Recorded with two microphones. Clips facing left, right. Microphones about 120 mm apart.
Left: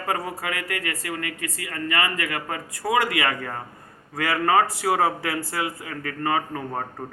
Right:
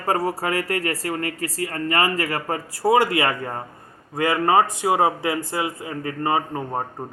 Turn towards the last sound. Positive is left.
turn(degrees=-20)  # may be behind; listen again after turning